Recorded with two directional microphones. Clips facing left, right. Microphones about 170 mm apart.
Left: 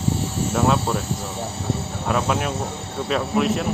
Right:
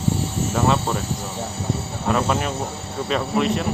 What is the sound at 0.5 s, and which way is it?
Speech, centre (ahead or behind).